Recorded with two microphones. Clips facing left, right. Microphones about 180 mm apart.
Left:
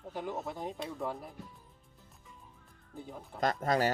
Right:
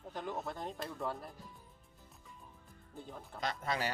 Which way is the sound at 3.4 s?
45° left (ahead or behind).